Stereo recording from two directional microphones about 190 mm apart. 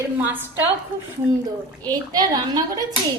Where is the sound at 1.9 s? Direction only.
20° right (ahead or behind).